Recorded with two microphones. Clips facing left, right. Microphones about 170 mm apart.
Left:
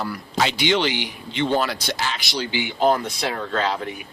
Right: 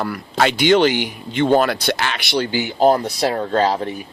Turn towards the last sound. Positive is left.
turn(degrees=-35)  # may be behind; listen again after turning